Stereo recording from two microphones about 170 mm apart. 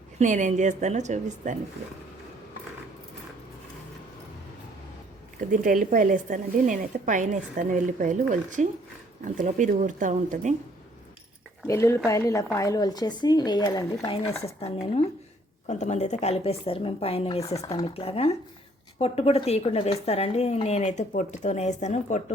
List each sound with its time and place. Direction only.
0.2 s speech: 50° right (ahead or behind)
5.4 s speech: 50° right (ahead or behind)
11.6 s a woman's voice: 15° left (ahead or behind)
14.4 s speech: 35° left (ahead or behind)